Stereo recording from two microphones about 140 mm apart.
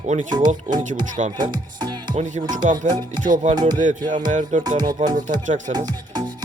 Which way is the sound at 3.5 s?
30° right (ahead or behind).